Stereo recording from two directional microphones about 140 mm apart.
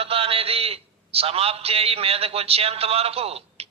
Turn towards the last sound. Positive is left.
turn(degrees=-45)  # may be behind; listen again after turning